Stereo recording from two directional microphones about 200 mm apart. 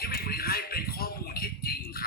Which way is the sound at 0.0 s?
50° left (ahead or behind).